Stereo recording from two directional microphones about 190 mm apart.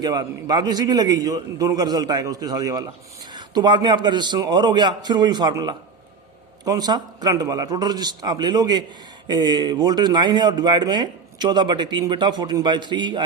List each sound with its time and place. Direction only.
0.0 s speech: 20° right (ahead or behind)